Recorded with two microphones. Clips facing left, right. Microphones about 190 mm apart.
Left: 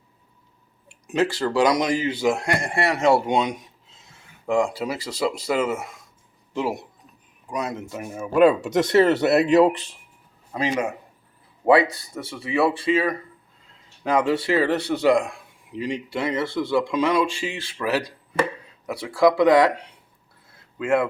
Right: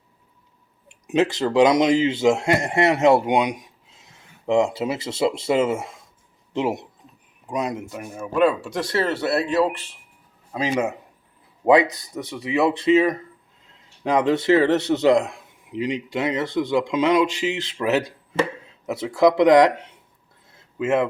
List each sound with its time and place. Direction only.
0.9 s speech: 20° right (ahead or behind)
7.9 s speech: centre (ahead or behind)
8.6 s speech: 20° left (ahead or behind)
10.5 s speech: 10° right (ahead or behind)
11.6 s a man's voice: 20° right (ahead or behind)